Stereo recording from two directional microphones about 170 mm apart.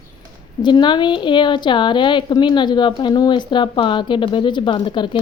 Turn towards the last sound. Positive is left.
turn(degrees=30)  # may be behind; listen again after turning